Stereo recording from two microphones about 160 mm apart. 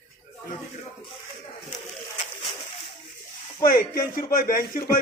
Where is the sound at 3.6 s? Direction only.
65° left (ahead or behind).